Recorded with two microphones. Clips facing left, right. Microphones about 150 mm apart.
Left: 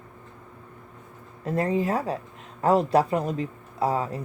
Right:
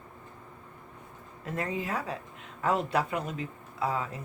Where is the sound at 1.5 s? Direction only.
35° left (ahead or behind).